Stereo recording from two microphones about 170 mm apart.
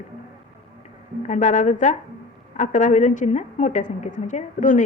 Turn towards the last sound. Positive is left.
turn(degrees=50)  # may be behind; listen again after turning